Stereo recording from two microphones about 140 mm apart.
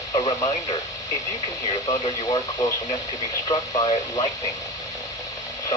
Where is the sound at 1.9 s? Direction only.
25° left (ahead or behind).